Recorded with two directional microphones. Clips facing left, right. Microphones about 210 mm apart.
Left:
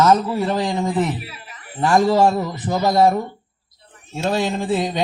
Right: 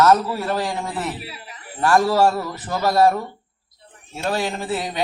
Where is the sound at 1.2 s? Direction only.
35° right (ahead or behind).